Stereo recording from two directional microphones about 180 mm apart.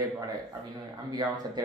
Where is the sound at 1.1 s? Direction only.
20° right (ahead or behind).